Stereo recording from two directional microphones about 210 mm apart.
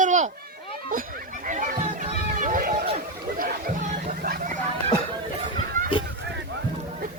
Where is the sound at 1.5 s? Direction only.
40° right (ahead or behind).